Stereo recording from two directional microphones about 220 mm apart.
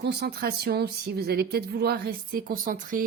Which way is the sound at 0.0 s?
45° right (ahead or behind).